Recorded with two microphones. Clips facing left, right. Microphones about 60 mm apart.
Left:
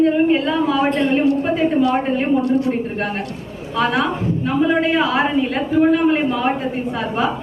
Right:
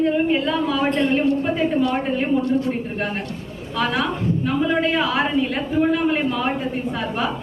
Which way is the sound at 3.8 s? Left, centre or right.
Centre.